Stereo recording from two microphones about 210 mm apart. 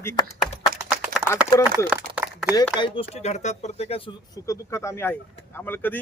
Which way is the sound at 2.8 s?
25° left (ahead or behind).